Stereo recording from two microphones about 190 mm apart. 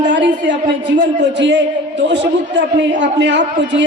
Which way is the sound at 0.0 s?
70° right (ahead or behind).